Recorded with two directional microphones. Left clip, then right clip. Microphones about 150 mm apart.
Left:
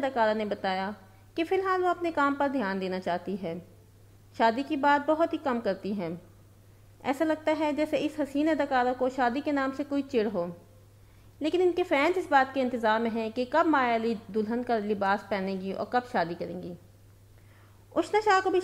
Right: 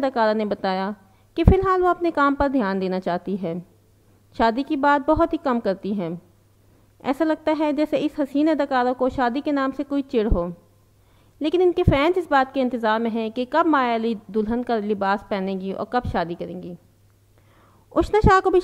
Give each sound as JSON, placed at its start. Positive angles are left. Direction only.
{"t": 0.1, "sound": "a woman's voice", "side_deg": -35}
{"t": 17.9, "sound": "a woman's voice", "side_deg": -40}